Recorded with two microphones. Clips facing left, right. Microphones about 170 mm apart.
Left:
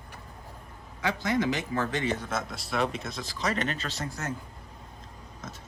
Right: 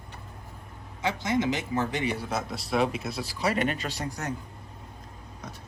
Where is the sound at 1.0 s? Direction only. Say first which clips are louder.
Right 1 dB; 20° right (ahead or behind).